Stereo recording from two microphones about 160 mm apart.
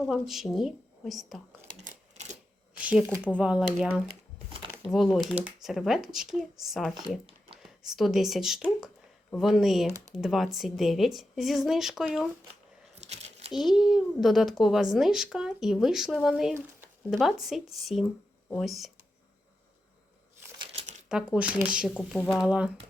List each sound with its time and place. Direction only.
0.1 s a child's voice: centre (ahead or behind)
1.8 s typewriter: 45° right (ahead or behind)
2.7 s a child's voice: 10° right (ahead or behind)
13.1 s a sound: 40° right (ahead or behind)
13.5 s a child's voice: centre (ahead or behind)
21.1 s a child's voice: 5° right (ahead or behind)